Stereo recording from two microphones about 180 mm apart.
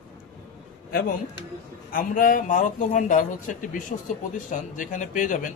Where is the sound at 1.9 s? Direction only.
50° left (ahead or behind).